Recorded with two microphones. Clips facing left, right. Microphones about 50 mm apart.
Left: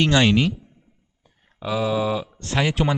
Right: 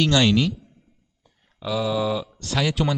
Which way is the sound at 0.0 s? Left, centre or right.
Left.